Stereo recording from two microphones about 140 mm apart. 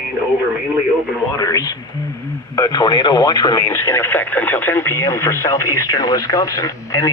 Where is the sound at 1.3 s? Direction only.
25° left (ahead or behind).